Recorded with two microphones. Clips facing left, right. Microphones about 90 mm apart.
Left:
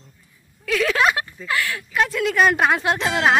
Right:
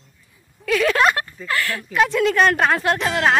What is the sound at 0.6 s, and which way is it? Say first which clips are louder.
A woman's voice: right 2 dB; centre (ahead or behind).